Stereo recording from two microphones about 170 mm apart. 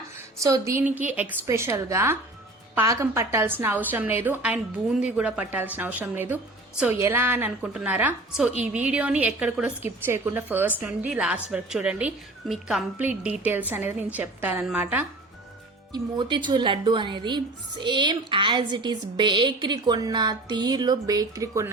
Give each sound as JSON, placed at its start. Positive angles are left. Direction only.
{"t": 0.4, "sound": "a woman's voice", "side_deg": -20}
{"t": 15.9, "sound": "speech", "side_deg": -25}